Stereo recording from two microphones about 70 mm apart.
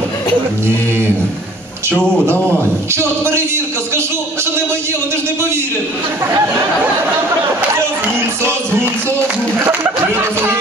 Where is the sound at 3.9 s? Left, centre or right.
Right.